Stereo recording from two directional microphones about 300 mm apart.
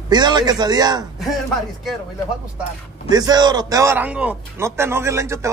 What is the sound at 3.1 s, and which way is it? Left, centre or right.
A man's voice, centre.